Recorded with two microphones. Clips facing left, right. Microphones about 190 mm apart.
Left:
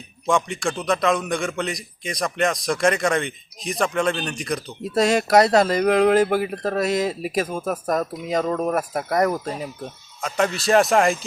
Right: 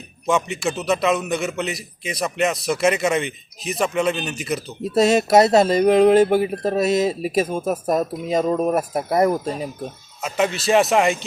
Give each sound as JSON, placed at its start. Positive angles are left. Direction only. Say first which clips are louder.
{"t": 0.3, "sound": "a man's voice", "louder": "right 1 dB", "side_deg": -5}
{"t": 4.9, "sound": "speech", "louder": "right 2 dB", "side_deg": -25}
{"t": 9.8, "sound": "a man's voice", "louder": "right 2 dB", "side_deg": -5}